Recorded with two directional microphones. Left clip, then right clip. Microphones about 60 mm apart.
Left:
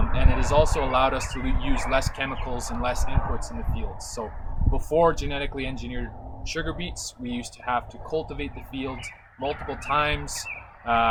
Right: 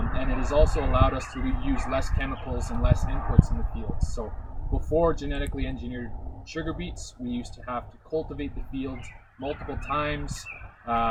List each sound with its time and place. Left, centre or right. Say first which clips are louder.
0.1 s speech: left 3 dB; left
4.9 s speech: left 3 dB; left